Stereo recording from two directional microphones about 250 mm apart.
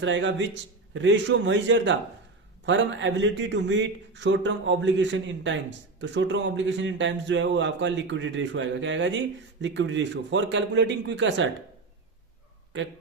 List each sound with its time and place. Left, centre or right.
0.0 s speech: right